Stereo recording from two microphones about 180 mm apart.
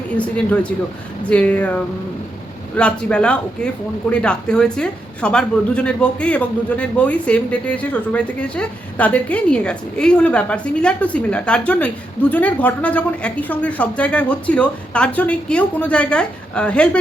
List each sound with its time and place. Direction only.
0.1 s a woman's voice: 5° left (ahead or behind)